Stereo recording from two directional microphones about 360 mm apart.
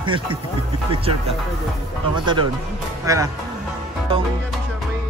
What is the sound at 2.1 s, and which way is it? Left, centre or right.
Speech, centre.